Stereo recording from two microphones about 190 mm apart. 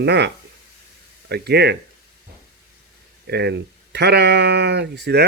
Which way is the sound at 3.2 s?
60° right (ahead or behind).